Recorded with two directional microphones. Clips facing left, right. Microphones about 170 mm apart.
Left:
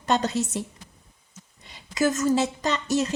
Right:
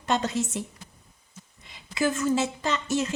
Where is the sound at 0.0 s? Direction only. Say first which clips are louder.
Left 2 dB; 35° left (ahead or behind).